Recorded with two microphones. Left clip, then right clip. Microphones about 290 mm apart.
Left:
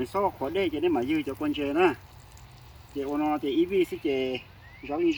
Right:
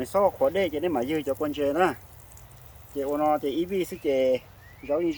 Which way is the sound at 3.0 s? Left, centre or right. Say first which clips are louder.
Right 4 dB; right.